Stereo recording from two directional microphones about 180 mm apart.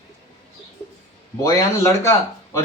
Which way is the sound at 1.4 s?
15° left (ahead or behind).